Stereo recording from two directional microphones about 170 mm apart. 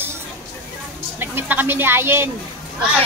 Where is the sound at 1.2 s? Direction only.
10° right (ahead or behind).